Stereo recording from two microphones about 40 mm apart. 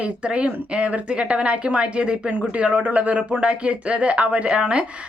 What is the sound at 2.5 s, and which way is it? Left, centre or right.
Speech, right.